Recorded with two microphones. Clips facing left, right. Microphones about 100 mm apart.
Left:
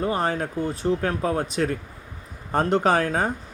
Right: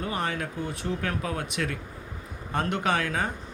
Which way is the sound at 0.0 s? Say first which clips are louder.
Left 6 dB; 35° left (ahead or behind).